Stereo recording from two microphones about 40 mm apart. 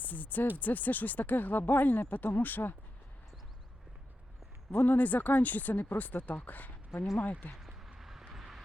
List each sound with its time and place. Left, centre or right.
0.0 s speech: left
4.7 s speech: left
7.9 s vehicle: centre